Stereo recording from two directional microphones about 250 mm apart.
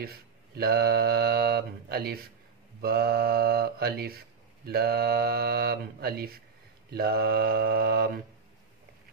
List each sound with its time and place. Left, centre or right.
0.0 s speech: right